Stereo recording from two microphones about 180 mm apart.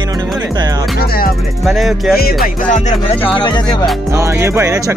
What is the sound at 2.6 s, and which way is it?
Music, 45° left (ahead or behind).